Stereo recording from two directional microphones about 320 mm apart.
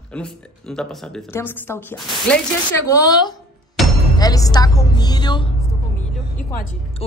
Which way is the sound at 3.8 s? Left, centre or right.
Centre.